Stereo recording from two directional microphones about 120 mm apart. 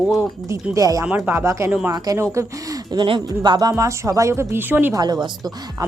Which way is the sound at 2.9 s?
40° right (ahead or behind).